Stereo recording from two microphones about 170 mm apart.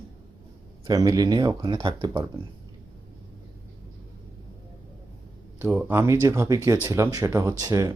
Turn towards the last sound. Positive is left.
turn(degrees=-20)  # may be behind; listen again after turning